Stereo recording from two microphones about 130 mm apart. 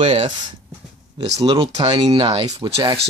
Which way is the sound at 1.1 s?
35° right (ahead or behind).